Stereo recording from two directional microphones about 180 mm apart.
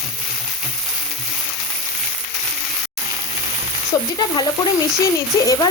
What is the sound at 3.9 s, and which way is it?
Frying, 20° left (ahead or behind).